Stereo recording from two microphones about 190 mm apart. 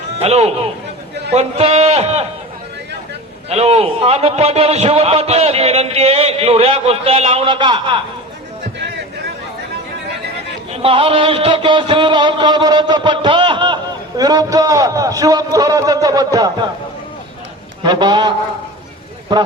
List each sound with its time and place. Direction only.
0.2 s a man's voice: 35° right (ahead or behind)
3.5 s a man's voice: 35° right (ahead or behind)
10.7 s a man's voice: 30° right (ahead or behind)
17.8 s a man's voice: 20° right (ahead or behind)